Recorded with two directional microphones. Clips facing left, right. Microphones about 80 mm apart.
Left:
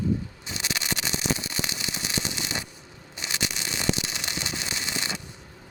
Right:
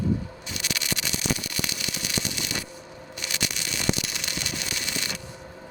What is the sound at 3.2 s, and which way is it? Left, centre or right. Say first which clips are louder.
Fireworks: left 1 dB; left.